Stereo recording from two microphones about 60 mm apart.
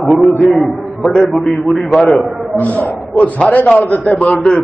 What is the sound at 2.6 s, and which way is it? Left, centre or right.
A man's voice, left.